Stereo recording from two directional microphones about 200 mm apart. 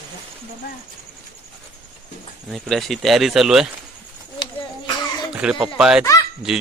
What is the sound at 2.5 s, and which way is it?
Speech, centre (ahead or behind).